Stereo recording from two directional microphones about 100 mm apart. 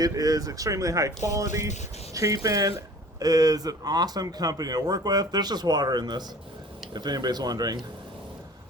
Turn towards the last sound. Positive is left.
turn(degrees=-40)  # may be behind; listen again after turning